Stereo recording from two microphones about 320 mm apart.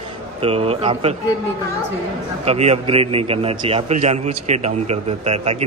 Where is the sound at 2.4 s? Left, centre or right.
Centre.